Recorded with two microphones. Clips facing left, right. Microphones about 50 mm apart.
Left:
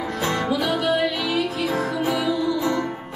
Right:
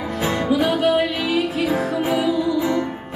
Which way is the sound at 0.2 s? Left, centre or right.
Centre.